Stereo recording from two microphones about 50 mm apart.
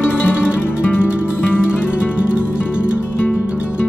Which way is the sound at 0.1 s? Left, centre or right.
Left.